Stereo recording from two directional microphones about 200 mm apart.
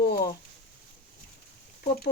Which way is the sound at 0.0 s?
55° left (ahead or behind).